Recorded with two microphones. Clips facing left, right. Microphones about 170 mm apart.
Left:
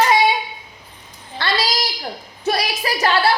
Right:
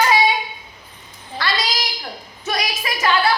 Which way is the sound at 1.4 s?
25° left (ahead or behind).